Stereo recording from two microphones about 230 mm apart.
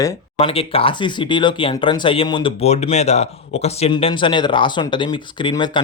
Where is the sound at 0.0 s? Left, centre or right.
Left.